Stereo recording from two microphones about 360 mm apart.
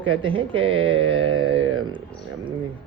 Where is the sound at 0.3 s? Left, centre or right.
Centre.